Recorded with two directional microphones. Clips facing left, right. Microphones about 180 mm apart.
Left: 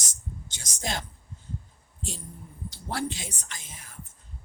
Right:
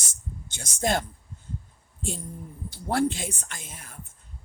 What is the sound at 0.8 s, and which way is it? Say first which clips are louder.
Speech: right 8 dB; 50° right (ahead or behind).